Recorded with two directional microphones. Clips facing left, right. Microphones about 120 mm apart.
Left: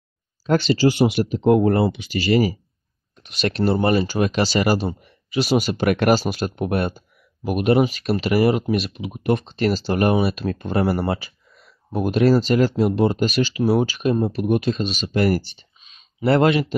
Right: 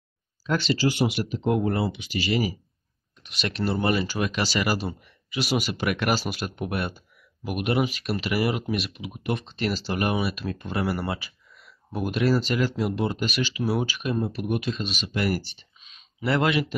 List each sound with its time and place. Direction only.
0.4 s speech: 40° left (ahead or behind)